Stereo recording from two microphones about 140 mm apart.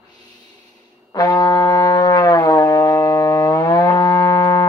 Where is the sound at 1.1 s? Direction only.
25° left (ahead or behind).